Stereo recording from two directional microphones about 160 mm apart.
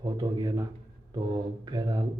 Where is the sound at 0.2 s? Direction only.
25° right (ahead or behind).